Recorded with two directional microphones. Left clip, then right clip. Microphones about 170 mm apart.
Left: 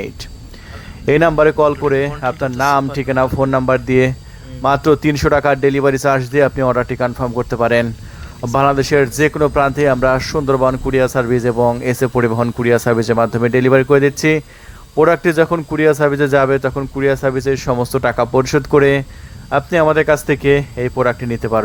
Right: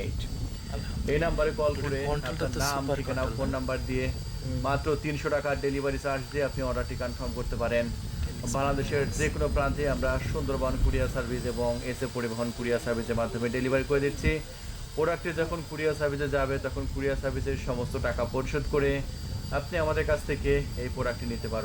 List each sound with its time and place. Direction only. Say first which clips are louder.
1.0 s speech: left 16 dB; 45° left (ahead or behind)